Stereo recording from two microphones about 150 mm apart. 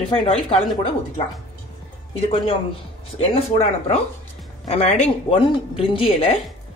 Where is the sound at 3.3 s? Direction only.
40° left (ahead or behind).